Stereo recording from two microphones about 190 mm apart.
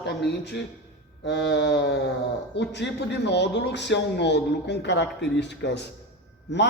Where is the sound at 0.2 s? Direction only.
60° left (ahead or behind).